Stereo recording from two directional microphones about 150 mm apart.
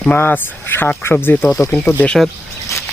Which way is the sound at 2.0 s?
5° left (ahead or behind).